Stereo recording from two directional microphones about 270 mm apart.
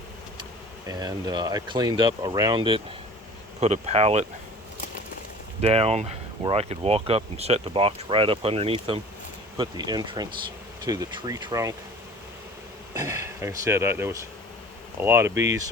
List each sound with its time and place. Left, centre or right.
0.9 s speech: centre
3.6 s speech: right
5.6 s speech: right
12.9 s speech: centre